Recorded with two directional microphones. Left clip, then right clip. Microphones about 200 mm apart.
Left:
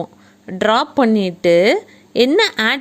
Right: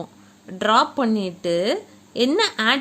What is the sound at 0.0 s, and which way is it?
A woman's voice, 30° left (ahead or behind).